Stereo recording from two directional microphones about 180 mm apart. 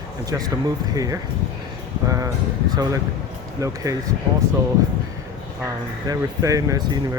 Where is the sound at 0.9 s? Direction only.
20° right (ahead or behind).